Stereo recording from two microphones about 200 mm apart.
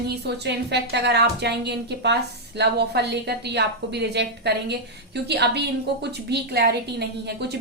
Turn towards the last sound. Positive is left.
turn(degrees=-55)  # may be behind; listen again after turning